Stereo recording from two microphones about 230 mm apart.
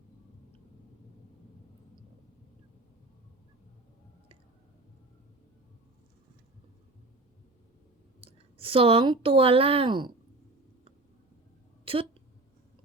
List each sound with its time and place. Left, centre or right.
8.2 s speech: right
11.9 s speech: right